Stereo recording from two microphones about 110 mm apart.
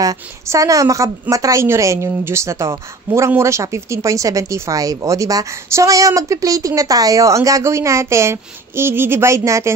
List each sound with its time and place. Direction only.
0.0 s a woman's voice: 35° right (ahead or behind)